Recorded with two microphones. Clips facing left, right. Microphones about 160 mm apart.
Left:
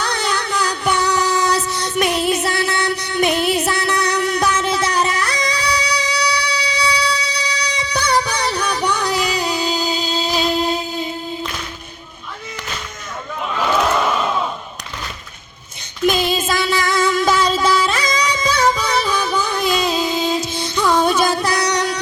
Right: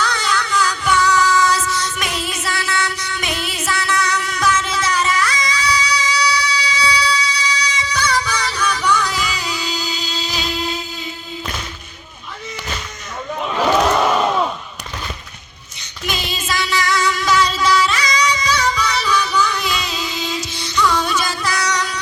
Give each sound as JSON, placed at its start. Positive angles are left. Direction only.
{"t": 0.0, "sound": "music", "side_deg": 60}
{"t": 16.0, "sound": "music", "side_deg": 50}